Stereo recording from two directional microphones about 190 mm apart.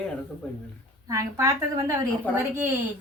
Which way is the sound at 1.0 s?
15° right (ahead or behind).